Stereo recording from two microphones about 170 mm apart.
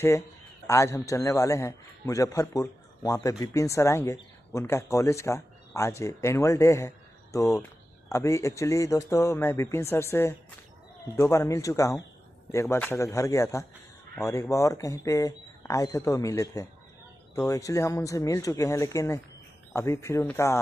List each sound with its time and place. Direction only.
0.0 s a man's voice: 15° left (ahead or behind)